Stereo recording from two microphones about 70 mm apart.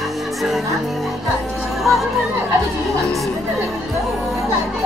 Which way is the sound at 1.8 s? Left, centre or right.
Centre.